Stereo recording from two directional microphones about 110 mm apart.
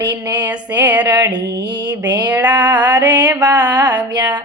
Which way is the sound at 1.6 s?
45° right (ahead or behind).